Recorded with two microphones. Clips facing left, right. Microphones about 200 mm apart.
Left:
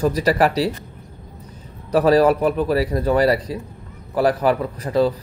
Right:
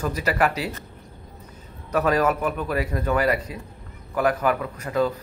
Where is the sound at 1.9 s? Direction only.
35° left (ahead or behind).